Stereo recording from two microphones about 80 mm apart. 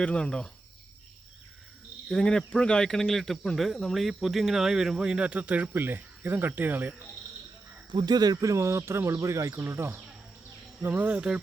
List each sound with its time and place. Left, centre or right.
0.0 s speech: centre
2.0 s speech: centre; by 6.9 s right
7.9 s speech: right; by 11.3 s centre